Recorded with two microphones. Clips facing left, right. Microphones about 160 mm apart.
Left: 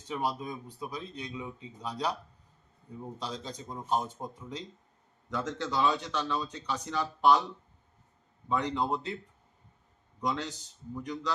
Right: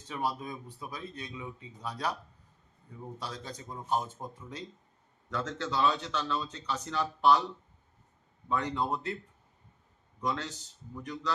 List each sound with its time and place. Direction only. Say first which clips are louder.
0.1 s speech: left 1 dB; 15° left (ahead or behind)
3.2 s speech: left 2 dB; 20° left (ahead or behind)
8.4 s speech: left 1 dB; 15° left (ahead or behind)
10.2 s speech: left 1 dB; 15° left (ahead or behind)